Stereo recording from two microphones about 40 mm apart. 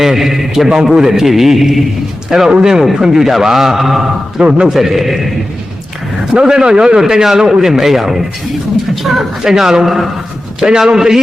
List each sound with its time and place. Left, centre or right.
0.0 s a man's voice: centre
4.4 s speech: right
4.7 s a man's voice: centre
6.4 s a man's voice: centre
9.4 s a man's voice: centre
10.6 s a man's voice: centre